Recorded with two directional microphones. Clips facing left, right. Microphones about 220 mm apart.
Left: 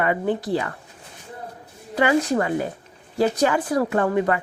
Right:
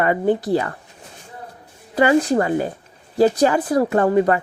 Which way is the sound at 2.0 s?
35° right (ahead or behind).